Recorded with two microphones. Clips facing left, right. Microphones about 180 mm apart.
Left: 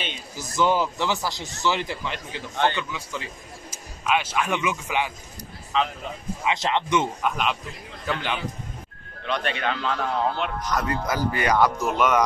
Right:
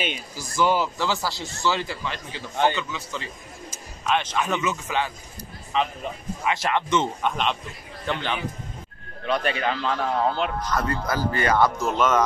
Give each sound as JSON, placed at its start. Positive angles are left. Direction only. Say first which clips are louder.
{"t": 0.4, "sound": "speech", "louder": "even", "side_deg": 20}
{"t": 2.5, "sound": "a man's voice", "louder": "right 1 dB", "side_deg": -15}
{"t": 2.9, "sound": "speech", "louder": "even", "side_deg": 10}
{"t": 3.7, "sound": "a sound", "louder": "even", "side_deg": 10}
{"t": 4.6, "sound": "speech", "louder": "even", "side_deg": 15}
{"t": 5.7, "sound": "speech", "louder": "even", "side_deg": -5}
{"t": 6.5, "sound": "speech", "louder": "even", "side_deg": 20}
{"t": 9.2, "sound": "speech", "louder": "right 2 dB", "side_deg": 0}
{"t": 10.7, "sound": "speech", "louder": "even", "side_deg": 15}